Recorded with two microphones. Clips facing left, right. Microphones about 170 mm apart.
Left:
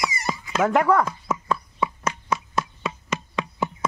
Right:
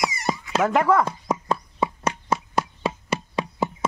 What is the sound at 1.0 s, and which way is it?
Horse, 30° right (ahead or behind).